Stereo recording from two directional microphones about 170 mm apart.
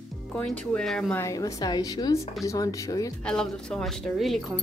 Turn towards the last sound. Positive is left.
turn(degrees=0)  # may be behind; listen again after turning